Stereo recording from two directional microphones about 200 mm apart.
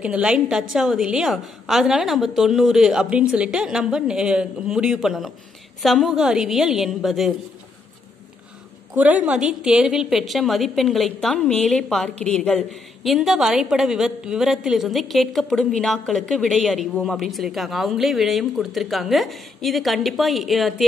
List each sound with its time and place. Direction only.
0.0 s a woman's voice: 5° right (ahead or behind)
8.9 s a woman's voice: 5° right (ahead or behind)